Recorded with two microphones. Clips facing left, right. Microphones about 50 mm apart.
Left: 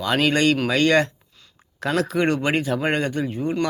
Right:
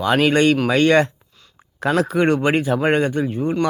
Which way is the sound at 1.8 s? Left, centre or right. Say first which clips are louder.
Right 4 dB; centre.